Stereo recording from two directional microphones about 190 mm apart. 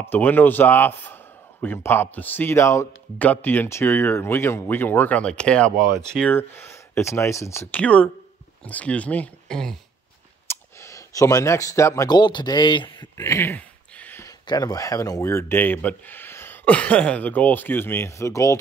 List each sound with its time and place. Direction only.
0.0 s a man's voice: 10° left (ahead or behind)
10.5 s speech: 15° left (ahead or behind)
13.2 s a sound: 15° left (ahead or behind)
14.4 s a man's voice: 20° left (ahead or behind)